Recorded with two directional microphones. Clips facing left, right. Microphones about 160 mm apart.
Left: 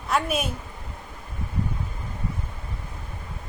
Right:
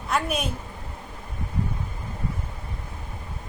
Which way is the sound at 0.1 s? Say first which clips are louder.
Left 1 dB; centre (ahead or behind).